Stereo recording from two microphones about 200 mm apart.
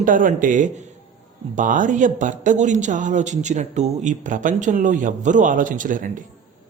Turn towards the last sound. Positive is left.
turn(degrees=-40)  # may be behind; listen again after turning